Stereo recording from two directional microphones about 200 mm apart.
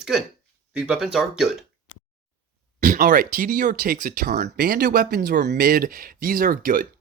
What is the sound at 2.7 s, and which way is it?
Speech, 40° right (ahead or behind).